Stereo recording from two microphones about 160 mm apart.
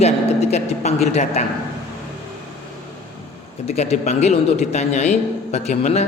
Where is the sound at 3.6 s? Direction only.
40° left (ahead or behind).